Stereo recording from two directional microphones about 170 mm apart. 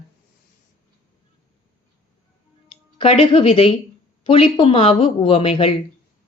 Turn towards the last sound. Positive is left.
turn(degrees=35)  # may be behind; listen again after turning